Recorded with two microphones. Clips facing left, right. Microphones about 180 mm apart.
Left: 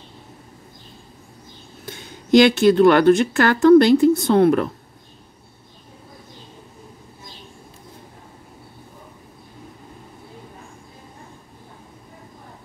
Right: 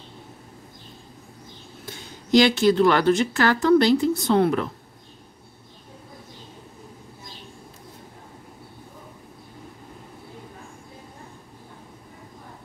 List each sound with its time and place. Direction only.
2.3 s a woman's voice: 55° left (ahead or behind)